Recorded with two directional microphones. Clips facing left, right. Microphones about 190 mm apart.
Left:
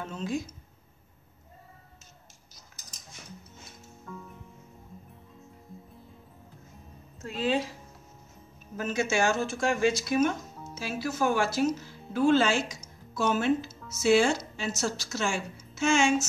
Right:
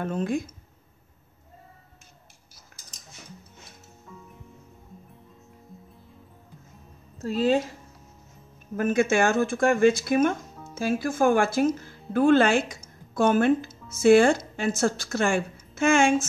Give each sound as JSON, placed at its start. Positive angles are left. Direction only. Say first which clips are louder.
{"t": 0.0, "sound": "speech", "louder": "right 6 dB", "side_deg": -55}
{"t": 7.2, "sound": "speech", "louder": "right 6 dB", "side_deg": -40}
{"t": 8.7, "sound": "speech", "louder": "right 6 dB", "side_deg": -55}